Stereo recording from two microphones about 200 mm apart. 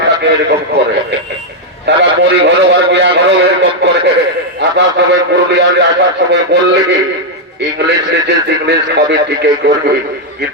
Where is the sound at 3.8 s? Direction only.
60° right (ahead or behind).